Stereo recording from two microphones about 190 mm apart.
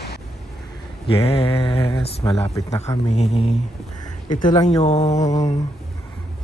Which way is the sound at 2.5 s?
15° left (ahead or behind).